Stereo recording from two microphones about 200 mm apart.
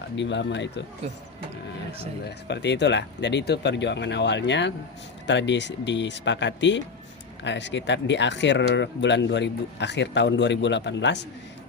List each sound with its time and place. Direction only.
0.2 s speech: 65° left (ahead or behind)
2.2 s speech: 60° left (ahead or behind)